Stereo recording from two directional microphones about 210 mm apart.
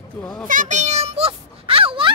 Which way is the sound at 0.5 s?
35° right (ahead or behind).